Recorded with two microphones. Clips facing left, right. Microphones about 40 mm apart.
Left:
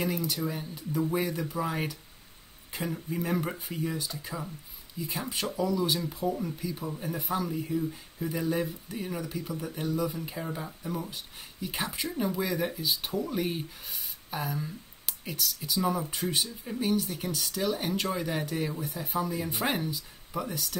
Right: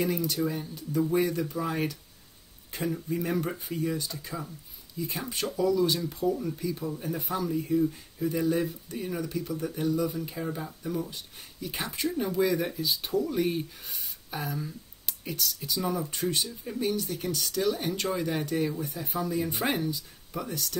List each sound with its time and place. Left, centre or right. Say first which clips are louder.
0.0 s speech: right 3 dB; centre
5.3 s speech: right 3 dB; centre